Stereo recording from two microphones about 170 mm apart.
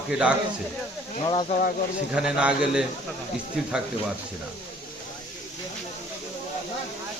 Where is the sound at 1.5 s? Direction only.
50° left (ahead or behind).